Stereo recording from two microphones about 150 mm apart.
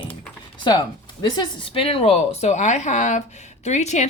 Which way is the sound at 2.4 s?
50° left (ahead or behind).